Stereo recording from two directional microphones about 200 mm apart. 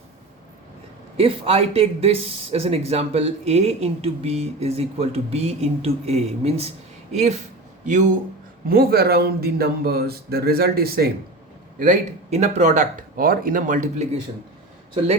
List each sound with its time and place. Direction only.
1.1 s speech: 30° right (ahead or behind)
8.6 s speech: 50° right (ahead or behind)
11.8 s speech: 35° right (ahead or behind)